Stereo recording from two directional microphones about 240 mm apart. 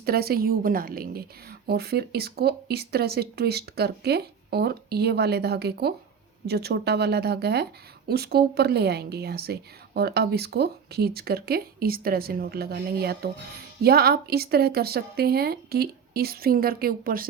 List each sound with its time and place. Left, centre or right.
0.0 s speech: right